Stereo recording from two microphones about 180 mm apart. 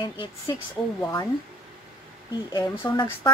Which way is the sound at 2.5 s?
15° left (ahead or behind).